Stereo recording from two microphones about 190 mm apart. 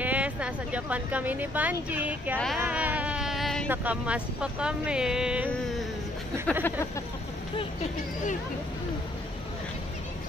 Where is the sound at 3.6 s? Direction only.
10° right (ahead or behind).